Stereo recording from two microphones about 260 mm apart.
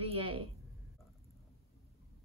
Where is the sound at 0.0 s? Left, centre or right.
Right.